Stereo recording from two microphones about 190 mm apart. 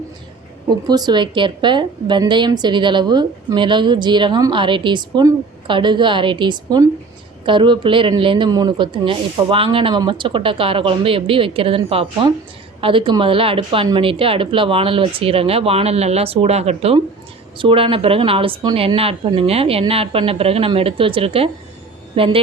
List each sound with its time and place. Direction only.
0.9 s a woman's voice: 20° right (ahead or behind)